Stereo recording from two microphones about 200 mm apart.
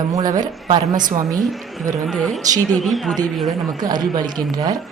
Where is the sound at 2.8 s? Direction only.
Centre (ahead or behind).